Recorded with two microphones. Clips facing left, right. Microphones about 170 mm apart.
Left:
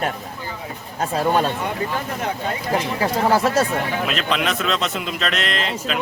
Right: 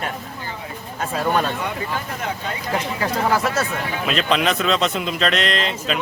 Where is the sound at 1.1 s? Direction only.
30° left (ahead or behind).